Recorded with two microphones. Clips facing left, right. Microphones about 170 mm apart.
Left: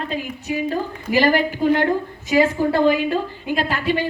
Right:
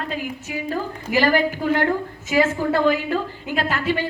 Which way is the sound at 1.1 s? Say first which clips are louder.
Left 1 dB; 15° left (ahead or behind).